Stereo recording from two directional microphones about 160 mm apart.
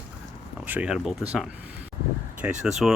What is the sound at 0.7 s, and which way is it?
Speech, 5° right (ahead or behind).